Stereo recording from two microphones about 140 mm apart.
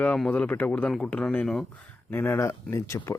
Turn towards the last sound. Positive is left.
turn(degrees=20)  # may be behind; listen again after turning